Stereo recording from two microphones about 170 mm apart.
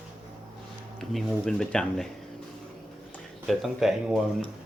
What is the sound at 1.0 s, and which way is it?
Speech, centre (ahead or behind).